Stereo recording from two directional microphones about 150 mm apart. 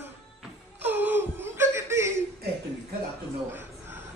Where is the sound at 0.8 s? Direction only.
10° right (ahead or behind).